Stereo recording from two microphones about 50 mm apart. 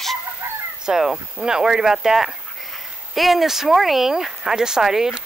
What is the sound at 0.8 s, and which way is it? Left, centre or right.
Speech, centre.